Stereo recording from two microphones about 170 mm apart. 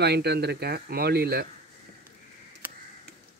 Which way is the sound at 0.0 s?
70° right (ahead or behind).